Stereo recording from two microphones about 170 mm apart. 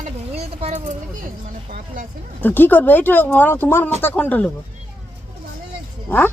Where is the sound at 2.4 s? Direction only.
10° left (ahead or behind).